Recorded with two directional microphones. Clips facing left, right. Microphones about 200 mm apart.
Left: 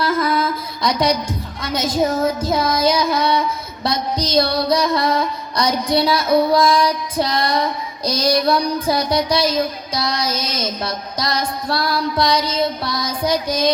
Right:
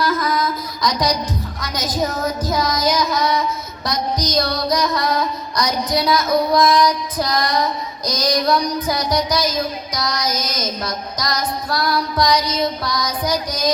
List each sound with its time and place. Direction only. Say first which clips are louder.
0.0 s music: left 1 dB; 30° left (ahead or behind)